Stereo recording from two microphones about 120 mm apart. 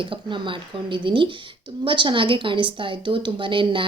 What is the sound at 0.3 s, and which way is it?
A woman's voice, 45° right (ahead or behind).